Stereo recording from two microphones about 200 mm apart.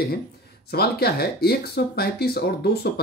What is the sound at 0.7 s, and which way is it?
Speech, 50° left (ahead or behind).